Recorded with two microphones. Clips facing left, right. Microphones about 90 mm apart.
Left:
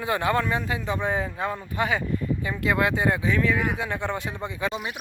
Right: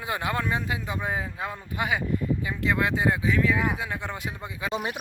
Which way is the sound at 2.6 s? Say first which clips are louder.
Left 2 dB; centre (ahead or behind).